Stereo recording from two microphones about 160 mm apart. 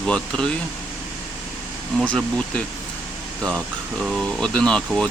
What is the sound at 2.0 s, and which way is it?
Speech, 5° left (ahead or behind).